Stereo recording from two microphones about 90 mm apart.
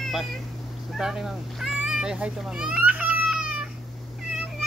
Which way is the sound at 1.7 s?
10° right (ahead or behind).